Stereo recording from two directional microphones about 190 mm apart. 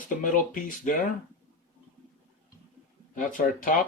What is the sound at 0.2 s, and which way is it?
Speech, 40° left (ahead or behind).